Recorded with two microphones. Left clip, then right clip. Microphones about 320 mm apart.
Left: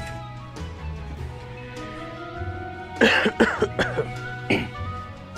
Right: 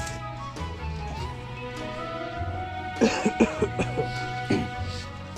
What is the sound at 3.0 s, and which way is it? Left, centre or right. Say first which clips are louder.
Cough: left 6 dB; left.